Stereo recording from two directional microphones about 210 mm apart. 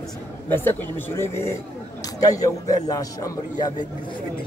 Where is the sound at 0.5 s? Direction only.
10° left (ahead or behind).